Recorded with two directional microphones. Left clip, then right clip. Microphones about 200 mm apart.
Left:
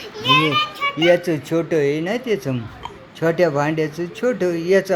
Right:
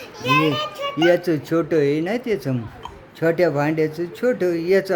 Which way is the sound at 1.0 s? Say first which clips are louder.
Left 1 dB; 20° right (ahead or behind).